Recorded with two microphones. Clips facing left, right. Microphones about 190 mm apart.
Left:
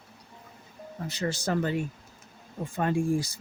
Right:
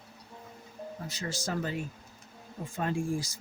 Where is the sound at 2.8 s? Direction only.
60° left (ahead or behind).